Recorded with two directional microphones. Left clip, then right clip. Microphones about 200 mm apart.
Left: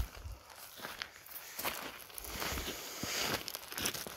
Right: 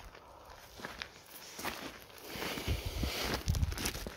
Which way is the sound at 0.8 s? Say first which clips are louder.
Even; 15° right (ahead or behind).